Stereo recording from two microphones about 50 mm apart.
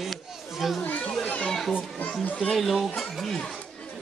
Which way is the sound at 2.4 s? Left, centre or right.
Centre.